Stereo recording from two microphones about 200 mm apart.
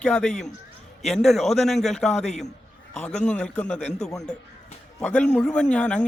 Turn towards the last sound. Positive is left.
turn(degrees=5)  # may be behind; listen again after turning